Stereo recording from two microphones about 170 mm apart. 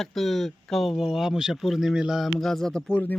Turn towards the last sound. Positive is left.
turn(degrees=5)  # may be behind; listen again after turning